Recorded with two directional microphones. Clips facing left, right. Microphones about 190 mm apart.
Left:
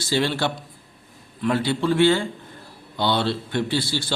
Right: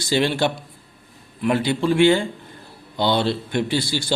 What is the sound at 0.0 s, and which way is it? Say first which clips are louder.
A man's voice: right 3 dB; 15° right (ahead or behind).